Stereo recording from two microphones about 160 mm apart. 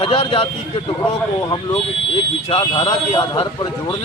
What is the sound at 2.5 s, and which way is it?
Speech, 30° left (ahead or behind).